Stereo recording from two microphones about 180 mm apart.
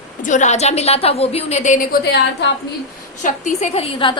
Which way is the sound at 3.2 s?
45° left (ahead or behind).